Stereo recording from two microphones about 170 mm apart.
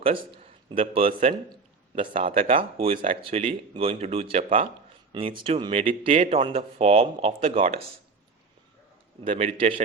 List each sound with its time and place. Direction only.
0.7 s speech: 30° right (ahead or behind)
9.2 s speech: 35° right (ahead or behind)